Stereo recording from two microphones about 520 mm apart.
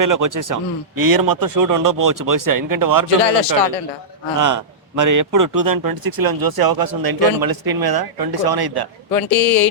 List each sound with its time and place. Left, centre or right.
0.0 s speech: right
3.2 s a man's voice: left
4.4 s speech: right